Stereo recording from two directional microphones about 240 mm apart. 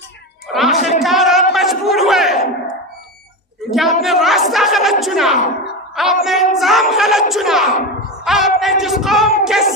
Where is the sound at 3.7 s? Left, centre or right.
Centre.